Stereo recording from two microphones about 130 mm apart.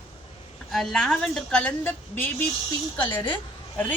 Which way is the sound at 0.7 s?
Centre (ahead or behind).